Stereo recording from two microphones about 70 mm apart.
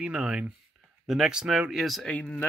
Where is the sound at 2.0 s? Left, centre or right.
Centre.